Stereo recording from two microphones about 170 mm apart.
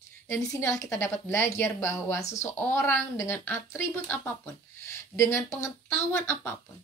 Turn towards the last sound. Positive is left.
turn(degrees=15)  # may be behind; listen again after turning